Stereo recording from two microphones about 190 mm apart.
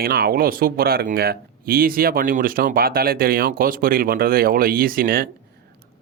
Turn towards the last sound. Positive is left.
turn(degrees=-50)  # may be behind; listen again after turning